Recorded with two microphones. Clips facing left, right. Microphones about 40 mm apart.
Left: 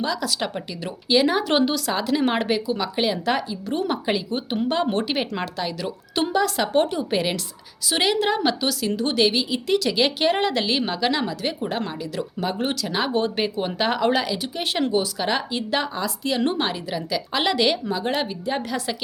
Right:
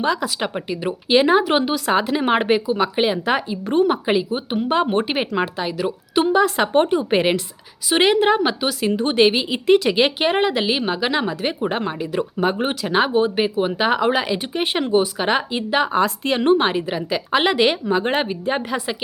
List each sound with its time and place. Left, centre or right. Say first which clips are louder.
0.0 s speech: right 5 dB; right
0.3 s a woman's voice: right 3 dB; right
1.5 s speech: right 1 dB; centre
1.9 s a woman's voice: right 4 dB; right
13.1 s speech: right 5 dB; centre
14.3 s a woman's voice: right 4 dB; right
15.9 s speech: right 7 dB; right
16.4 s a woman's voice: right 10 dB; right